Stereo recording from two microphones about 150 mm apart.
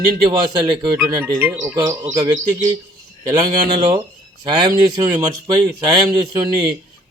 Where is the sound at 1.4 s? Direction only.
15° right (ahead or behind).